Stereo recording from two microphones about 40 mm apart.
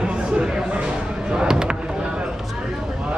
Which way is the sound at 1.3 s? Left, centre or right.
Centre.